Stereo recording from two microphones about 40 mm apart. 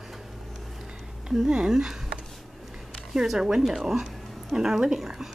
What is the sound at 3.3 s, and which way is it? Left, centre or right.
Speech, centre.